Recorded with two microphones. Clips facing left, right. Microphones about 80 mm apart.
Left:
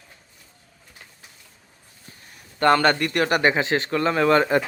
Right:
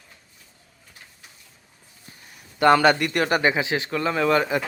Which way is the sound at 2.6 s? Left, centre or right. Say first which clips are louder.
Right 1 dB; centre.